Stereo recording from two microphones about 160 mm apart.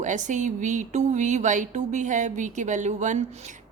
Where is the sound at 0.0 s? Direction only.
50° right (ahead or behind).